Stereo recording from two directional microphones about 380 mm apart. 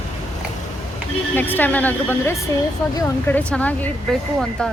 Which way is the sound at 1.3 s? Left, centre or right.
Centre.